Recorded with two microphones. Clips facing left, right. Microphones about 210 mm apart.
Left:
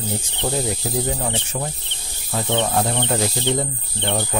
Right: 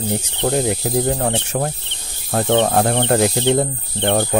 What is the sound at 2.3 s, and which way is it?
Speech, 50° right (ahead or behind).